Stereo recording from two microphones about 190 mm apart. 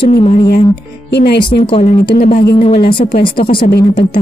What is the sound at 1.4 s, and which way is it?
A woman's voice, 25° left (ahead or behind).